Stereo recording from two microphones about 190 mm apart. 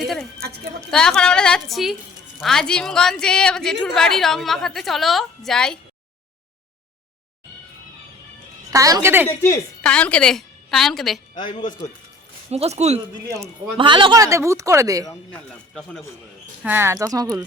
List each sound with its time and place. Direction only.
0.9 s a woman's voice: 5° left (ahead or behind)
8.7 s speech: 15° right (ahead or behind)
9.2 s a woman's voice: 15° left (ahead or behind)
12.5 s speech: 35° right (ahead or behind); by 15.0 s 15° right (ahead or behind)
15.3 s a woman's voice: 5° left (ahead or behind)
16.6 s speech: 10° right (ahead or behind)